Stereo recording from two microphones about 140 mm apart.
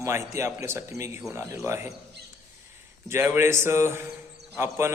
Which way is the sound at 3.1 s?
15° right (ahead or behind).